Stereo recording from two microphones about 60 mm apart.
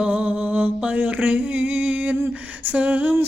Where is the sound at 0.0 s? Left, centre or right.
Right.